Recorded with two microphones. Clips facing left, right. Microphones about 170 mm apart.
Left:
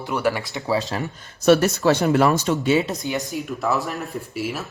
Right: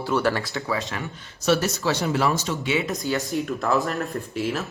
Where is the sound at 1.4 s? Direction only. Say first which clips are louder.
Left 6 dB; 55° left (ahead or behind).